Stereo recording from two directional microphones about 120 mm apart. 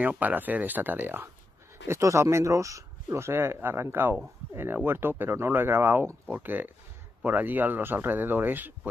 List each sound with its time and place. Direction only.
0.0 s speech: 15° right (ahead or behind)